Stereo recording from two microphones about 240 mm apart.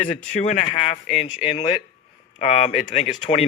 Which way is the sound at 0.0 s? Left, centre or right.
Left.